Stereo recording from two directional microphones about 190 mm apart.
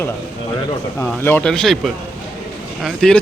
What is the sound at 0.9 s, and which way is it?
Speech, 10° left (ahead or behind).